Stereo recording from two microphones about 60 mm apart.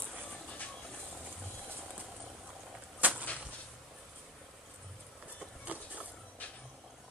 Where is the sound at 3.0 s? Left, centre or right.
Right.